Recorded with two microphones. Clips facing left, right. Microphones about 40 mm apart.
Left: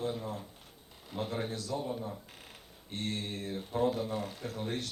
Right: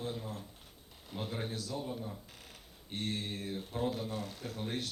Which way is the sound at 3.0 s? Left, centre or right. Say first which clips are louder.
Left 1 dB; centre.